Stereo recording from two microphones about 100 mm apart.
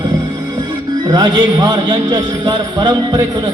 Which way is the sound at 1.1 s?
45° right (ahead or behind).